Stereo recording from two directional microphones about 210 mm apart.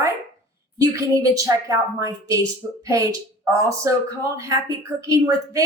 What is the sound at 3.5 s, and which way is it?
Speech, 15° right (ahead or behind).